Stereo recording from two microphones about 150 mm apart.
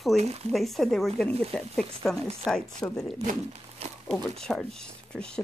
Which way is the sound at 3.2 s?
50° right (ahead or behind).